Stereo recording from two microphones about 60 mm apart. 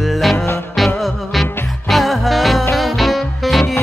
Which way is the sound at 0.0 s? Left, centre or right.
Centre.